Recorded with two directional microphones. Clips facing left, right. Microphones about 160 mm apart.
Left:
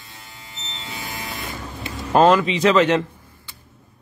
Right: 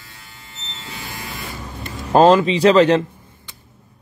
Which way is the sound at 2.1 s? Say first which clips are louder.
Right 3 dB; 35° right (ahead or behind).